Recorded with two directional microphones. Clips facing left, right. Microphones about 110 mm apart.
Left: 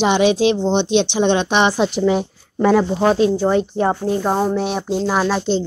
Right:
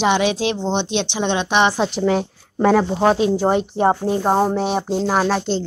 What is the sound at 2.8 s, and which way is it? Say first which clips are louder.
Speech: left 1 dB; 20° right (ahead or behind).